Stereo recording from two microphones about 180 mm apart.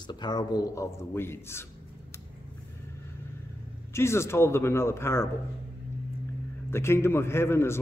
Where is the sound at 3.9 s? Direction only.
15° left (ahead or behind).